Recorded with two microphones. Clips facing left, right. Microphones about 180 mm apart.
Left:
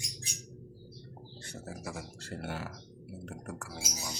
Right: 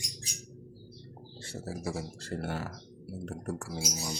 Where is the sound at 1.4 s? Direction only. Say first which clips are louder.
Right 6 dB; 30° right (ahead or behind).